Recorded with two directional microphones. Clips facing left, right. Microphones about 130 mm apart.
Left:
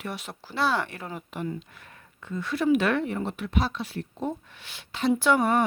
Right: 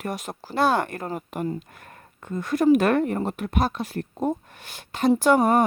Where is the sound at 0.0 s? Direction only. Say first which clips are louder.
Right 5 dB; 45° right (ahead or behind).